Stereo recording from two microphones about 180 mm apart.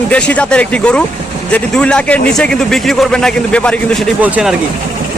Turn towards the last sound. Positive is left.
turn(degrees=-5)  # may be behind; listen again after turning